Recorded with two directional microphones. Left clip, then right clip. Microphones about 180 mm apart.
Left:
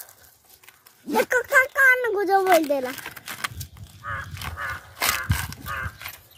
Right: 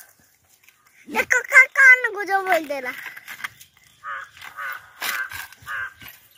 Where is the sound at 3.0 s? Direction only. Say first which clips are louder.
Left 1 dB; 40° left (ahead or behind).